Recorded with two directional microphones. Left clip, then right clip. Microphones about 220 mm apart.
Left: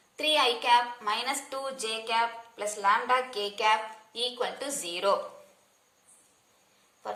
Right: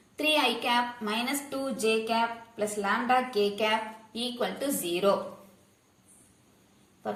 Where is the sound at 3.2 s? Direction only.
20° left (ahead or behind).